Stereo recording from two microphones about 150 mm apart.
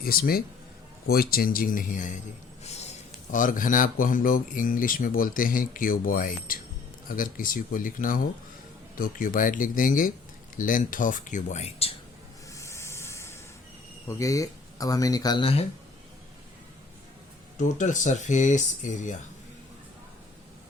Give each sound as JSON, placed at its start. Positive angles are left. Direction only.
{"t": 0.0, "sound": "speech", "side_deg": 80}
{"t": 2.6, "sound": "a sound", "side_deg": 45}
{"t": 3.3, "sound": "speech", "side_deg": 60}
{"t": 12.5, "sound": "a sound", "side_deg": 20}
{"t": 14.1, "sound": "speech", "side_deg": 20}
{"t": 17.6, "sound": "speech", "side_deg": 55}